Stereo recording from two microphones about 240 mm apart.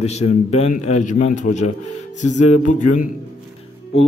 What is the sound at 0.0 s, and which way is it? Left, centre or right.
A man's voice, left.